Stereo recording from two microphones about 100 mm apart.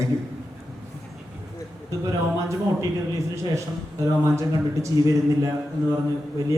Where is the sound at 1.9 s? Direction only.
35° right (ahead or behind).